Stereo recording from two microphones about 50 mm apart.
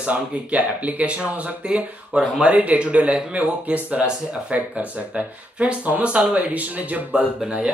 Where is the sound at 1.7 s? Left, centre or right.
Centre; by 7.2 s right.